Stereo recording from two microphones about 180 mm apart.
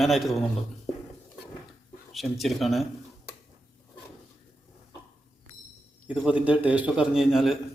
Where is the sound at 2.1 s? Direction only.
Centre (ahead or behind).